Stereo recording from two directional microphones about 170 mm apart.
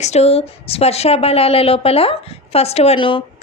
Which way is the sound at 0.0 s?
40° left (ahead or behind).